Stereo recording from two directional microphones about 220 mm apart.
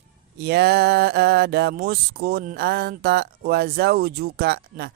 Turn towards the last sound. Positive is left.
turn(degrees=-45)  # may be behind; listen again after turning